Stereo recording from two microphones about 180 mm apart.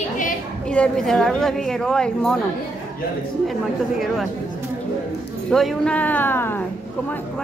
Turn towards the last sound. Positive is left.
turn(degrees=10)  # may be behind; listen again after turning